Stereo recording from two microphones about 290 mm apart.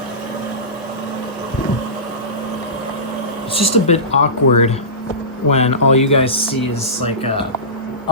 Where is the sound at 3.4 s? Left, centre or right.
Centre.